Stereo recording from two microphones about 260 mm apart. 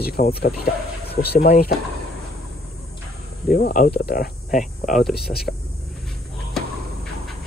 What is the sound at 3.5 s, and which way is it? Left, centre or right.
Speech, left.